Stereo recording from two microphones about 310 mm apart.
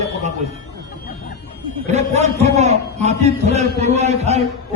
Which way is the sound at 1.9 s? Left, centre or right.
Right.